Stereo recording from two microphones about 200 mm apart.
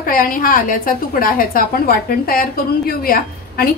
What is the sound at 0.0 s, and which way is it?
A woman's voice, 45° left (ahead or behind).